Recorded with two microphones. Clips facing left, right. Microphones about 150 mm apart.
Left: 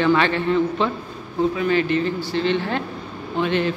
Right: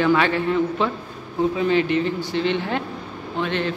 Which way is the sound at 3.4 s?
5° left (ahead or behind).